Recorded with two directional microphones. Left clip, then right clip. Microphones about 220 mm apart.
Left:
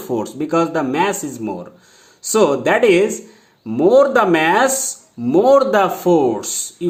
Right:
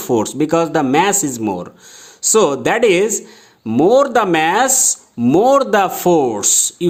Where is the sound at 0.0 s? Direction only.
45° right (ahead or behind).